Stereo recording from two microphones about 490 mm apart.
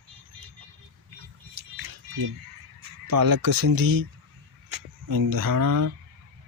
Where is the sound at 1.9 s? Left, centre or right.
Right.